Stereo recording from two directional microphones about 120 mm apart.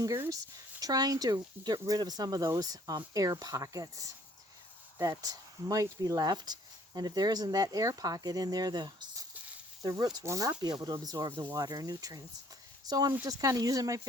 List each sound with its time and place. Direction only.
0.8 s speech: 30° right (ahead or behind)
5.2 s speech: 30° right (ahead or behind)
11.3 s speech: 20° right (ahead or behind)
11.5 s speech: 35° right (ahead or behind)